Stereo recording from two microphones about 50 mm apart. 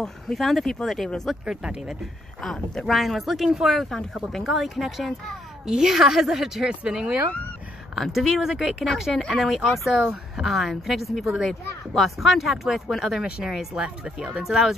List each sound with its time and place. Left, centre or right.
0.0 s speech: centre
1.5 s a woman's voice: centre
2.4 s speech: centre
2.9 s speech: centre
3.4 s a woman's voice: centre
6.7 s speech: right
7.9 s a woman's voice: centre